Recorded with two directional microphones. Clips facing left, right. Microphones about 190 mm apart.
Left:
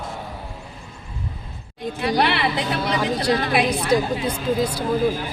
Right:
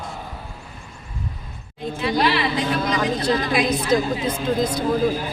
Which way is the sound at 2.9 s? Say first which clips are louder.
Even; 10° left (ahead or behind).